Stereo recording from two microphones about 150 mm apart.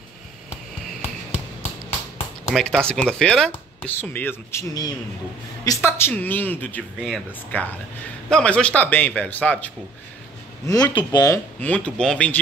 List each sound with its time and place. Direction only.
2.5 s speech: centre (ahead or behind)
10.7 s speech: 25° left (ahead or behind)
11.6 s speech: 10° left (ahead or behind)